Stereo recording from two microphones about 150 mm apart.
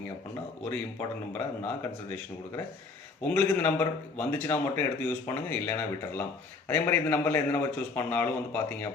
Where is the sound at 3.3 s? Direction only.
15° left (ahead or behind).